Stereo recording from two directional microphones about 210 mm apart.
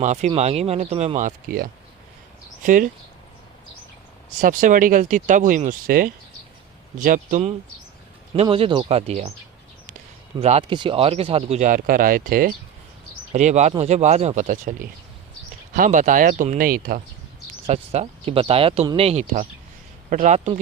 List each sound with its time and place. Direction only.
0.0 s speech: 35° right (ahead or behind)
4.4 s speech: 40° right (ahead or behind)
8.4 s speech: 25° right (ahead or behind)
10.4 s speech: 25° right (ahead or behind); by 17.0 s 45° right (ahead or behind)
17.7 s speech: 30° right (ahead or behind)